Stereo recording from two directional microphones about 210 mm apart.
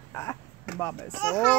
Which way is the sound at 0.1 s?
10° left (ahead or behind).